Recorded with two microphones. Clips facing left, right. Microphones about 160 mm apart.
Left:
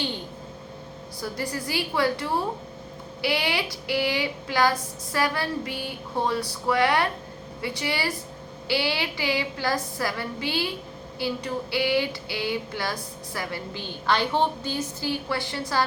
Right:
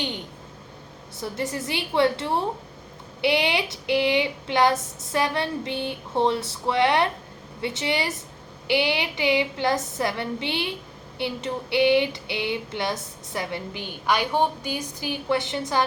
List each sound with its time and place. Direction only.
1.2 s female singing: 25° right (ahead or behind)